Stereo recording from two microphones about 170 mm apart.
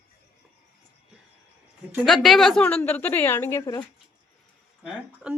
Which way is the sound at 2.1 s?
Centre (ahead or behind).